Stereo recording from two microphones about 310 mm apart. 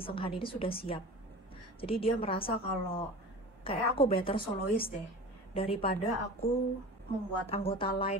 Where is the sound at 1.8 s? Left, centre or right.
Centre.